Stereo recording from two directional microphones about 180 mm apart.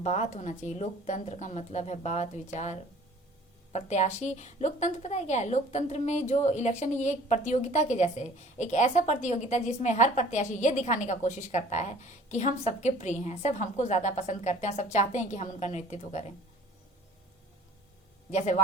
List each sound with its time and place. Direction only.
0.0 s a woman's voice: 40° left (ahead or behind)
18.3 s a woman's voice: 40° left (ahead or behind)